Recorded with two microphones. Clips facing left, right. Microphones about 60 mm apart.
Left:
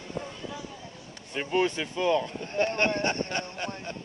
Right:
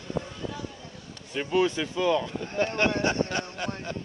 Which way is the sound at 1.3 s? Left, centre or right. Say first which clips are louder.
Right 2 dB; left.